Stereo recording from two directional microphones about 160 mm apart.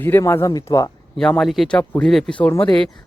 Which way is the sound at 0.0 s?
15° left (ahead or behind).